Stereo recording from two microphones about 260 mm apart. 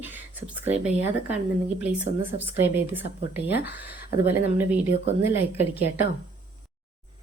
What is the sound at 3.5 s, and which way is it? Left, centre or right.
Speech, left.